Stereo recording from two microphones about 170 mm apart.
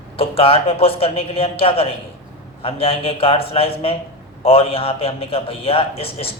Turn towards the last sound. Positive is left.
turn(degrees=35)  # may be behind; listen again after turning